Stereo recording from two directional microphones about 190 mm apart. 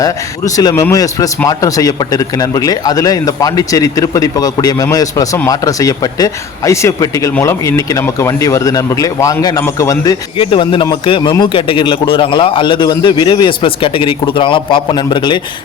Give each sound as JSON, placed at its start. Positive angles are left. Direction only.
{"t": 0.0, "sound": "a man's voice", "side_deg": 20}